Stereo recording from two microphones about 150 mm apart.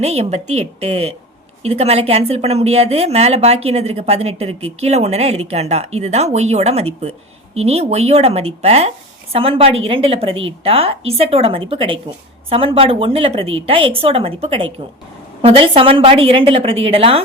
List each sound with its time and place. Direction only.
0.0 s a woman's voice: 45° right (ahead or behind)